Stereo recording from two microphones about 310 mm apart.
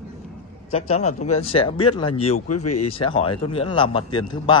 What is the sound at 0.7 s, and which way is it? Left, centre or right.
A man's voice, centre.